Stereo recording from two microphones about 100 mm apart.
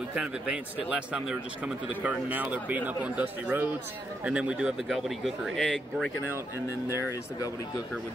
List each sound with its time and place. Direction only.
0.1 s speech: 10° right (ahead or behind)
7.0 s speech: 35° left (ahead or behind)